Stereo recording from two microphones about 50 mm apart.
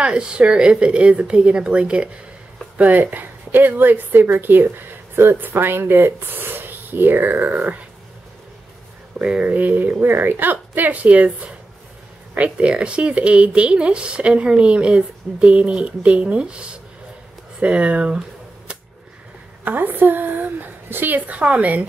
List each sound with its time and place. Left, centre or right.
0.0 s speech: centre
2.8 s a woman's voice: right
7.4 s a woman's voice: right
9.2 s a woman's voice: right
19.6 s a woman's voice: right